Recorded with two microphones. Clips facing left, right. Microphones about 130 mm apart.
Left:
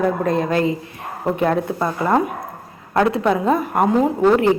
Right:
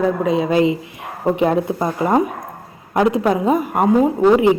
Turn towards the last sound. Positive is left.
turn(degrees=-10)  # may be behind; listen again after turning